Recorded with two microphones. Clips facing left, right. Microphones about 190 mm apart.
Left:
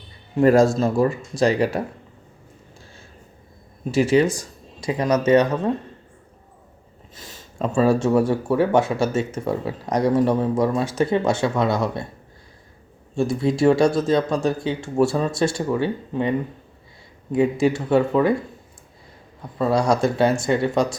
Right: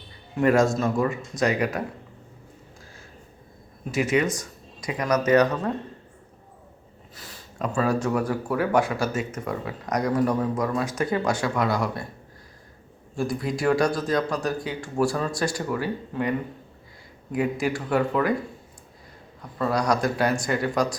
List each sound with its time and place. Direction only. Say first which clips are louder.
0.3 s speech: left 5 dB; 35° left (ahead or behind)
3.9 s speech: left 6 dB; 30° left (ahead or behind)
7.2 s speech: left 4 dB; 20° left (ahead or behind)
13.1 s speech: left 7 dB; 25° left (ahead or behind)
17.3 s speech: left 6 dB; 25° left (ahead or behind)
19.4 s speech: left 5 dB; 25° left (ahead or behind)